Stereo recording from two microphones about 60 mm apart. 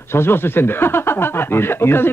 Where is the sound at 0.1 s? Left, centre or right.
Left.